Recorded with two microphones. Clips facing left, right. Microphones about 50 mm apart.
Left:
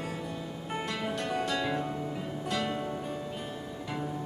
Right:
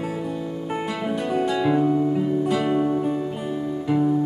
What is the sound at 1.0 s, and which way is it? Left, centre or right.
Music, centre.